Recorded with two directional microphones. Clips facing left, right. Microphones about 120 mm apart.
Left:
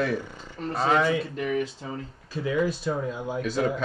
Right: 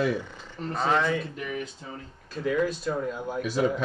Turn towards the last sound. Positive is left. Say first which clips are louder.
# right 1 dB
turn(degrees=-5)  # may be behind; listen again after turning